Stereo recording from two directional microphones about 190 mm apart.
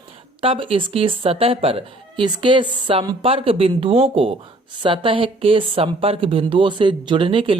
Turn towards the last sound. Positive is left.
turn(degrees=-30)  # may be behind; listen again after turning